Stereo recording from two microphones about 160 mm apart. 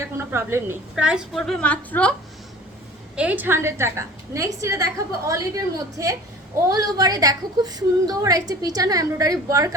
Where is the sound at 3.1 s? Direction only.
10° right (ahead or behind).